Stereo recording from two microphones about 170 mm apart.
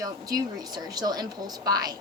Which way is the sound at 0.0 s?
20° right (ahead or behind).